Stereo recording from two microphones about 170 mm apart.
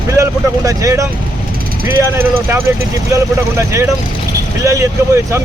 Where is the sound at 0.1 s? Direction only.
20° right (ahead or behind).